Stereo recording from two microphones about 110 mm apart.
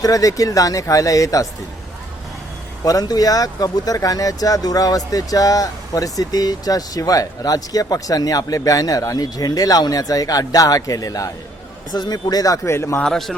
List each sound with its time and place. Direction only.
0.0 s speech: 30° left (ahead or behind)
2.8 s speech: 35° left (ahead or behind)
13.0 s a man's voice: 5° left (ahead or behind)